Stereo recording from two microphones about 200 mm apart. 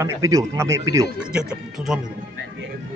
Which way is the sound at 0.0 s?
15° right (ahead or behind).